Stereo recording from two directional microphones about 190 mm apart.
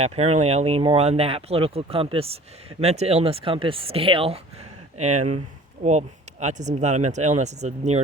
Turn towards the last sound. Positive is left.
turn(degrees=-35)  # may be behind; listen again after turning